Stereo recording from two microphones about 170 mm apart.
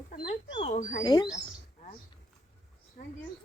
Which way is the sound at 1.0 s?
25° left (ahead or behind).